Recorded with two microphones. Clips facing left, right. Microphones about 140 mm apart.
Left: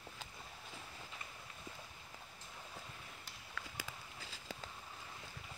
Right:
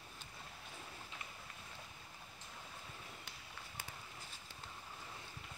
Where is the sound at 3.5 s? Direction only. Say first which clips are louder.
Left 4 dB; 90° left.